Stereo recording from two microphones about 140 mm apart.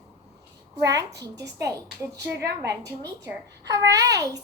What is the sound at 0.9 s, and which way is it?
A child's voice, 25° right (ahead or behind).